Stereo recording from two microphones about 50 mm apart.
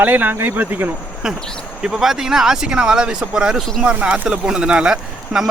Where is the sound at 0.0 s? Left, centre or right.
Right.